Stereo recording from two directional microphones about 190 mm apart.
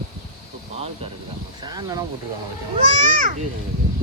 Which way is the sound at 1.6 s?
20° right (ahead or behind).